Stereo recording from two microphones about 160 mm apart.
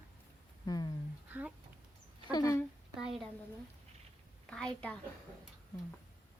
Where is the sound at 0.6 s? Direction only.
25° left (ahead or behind).